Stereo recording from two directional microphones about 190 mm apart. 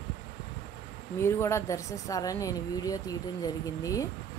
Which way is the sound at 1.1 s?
15° left (ahead or behind).